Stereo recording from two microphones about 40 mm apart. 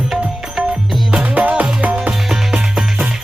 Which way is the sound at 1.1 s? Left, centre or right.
Right.